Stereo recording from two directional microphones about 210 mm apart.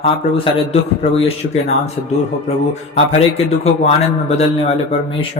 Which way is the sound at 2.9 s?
30° left (ahead or behind).